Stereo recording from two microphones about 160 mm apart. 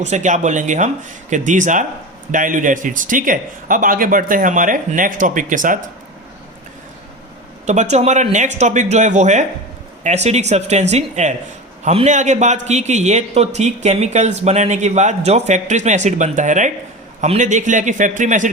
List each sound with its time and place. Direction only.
0.0 s a man's voice: 50° right (ahead or behind)
7.7 s a man's voice: 45° right (ahead or behind)